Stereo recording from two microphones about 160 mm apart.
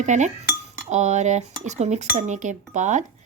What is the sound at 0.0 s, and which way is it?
Speech, 50° right (ahead or behind).